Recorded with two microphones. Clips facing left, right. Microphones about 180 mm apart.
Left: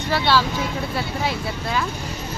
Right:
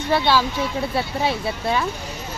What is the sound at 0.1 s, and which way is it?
Speech, 20° right (ahead or behind).